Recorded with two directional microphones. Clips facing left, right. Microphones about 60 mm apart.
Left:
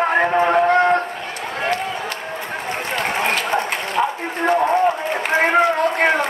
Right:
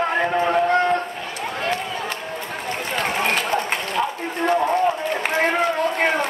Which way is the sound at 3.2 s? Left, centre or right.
Left.